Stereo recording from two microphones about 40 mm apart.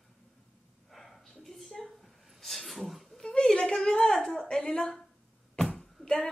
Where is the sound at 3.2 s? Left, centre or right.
Centre.